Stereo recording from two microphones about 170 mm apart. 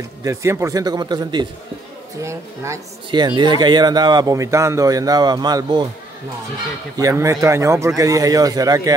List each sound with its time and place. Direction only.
0.2 s speech: 15° right (ahead or behind)
3.1 s speech: 25° right (ahead or behind)
7.0 s speech: 20° right (ahead or behind)